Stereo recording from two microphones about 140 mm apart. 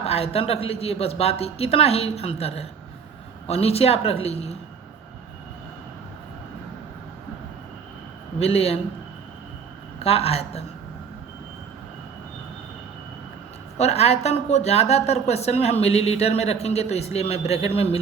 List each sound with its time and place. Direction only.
0.0 s a woman's voice: 45° left (ahead or behind)
8.4 s a woman's voice: 45° left (ahead or behind)
10.0 s a woman's voice: 45° left (ahead or behind)
13.7 s a woman's voice: 50° left (ahead or behind)